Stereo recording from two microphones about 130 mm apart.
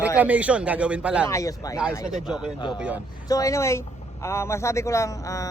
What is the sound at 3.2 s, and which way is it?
Speech, 25° left (ahead or behind).